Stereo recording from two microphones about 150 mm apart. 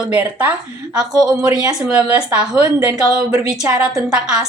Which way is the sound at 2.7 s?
20° right (ahead or behind).